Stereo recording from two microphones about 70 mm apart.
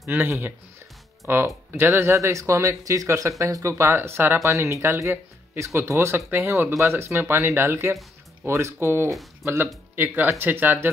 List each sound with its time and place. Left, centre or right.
0.1 s speech: right
4.4 s speech: right
5.6 s speech: right
9.9 s speech: right